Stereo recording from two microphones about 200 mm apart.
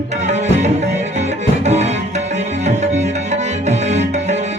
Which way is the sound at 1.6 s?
35° right (ahead or behind).